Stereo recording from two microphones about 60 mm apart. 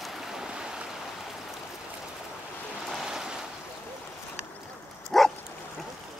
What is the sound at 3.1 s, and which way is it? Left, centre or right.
Waves, centre.